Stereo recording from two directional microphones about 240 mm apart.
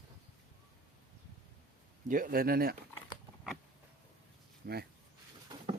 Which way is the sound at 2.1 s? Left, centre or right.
Right.